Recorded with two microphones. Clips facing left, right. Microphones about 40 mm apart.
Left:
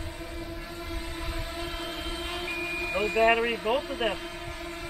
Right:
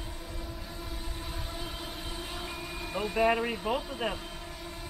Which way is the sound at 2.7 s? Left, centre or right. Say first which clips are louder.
Left 5 dB; left.